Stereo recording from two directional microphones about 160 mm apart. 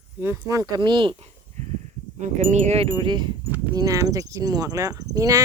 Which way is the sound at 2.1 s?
50° right (ahead or behind).